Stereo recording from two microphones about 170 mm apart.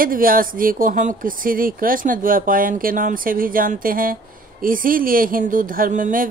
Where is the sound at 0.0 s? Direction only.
55° right (ahead or behind).